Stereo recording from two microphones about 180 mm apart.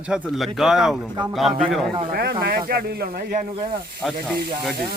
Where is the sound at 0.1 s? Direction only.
Centre (ahead or behind).